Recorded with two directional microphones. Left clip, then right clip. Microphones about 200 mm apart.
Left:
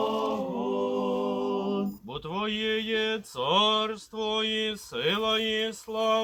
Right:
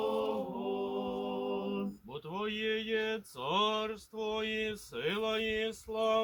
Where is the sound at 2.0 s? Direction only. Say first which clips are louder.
Left 5 dB; 25° right (ahead or behind).